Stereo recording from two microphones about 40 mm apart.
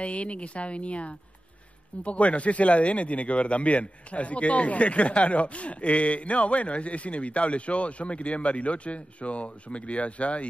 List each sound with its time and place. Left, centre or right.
0.0 s speech: left